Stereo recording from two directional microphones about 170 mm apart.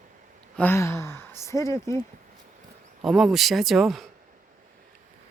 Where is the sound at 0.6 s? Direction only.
15° left (ahead or behind).